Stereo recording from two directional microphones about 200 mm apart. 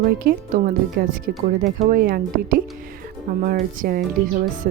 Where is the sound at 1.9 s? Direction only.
45° right (ahead or behind).